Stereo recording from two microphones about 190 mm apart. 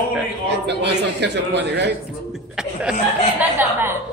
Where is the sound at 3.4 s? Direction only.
10° right (ahead or behind).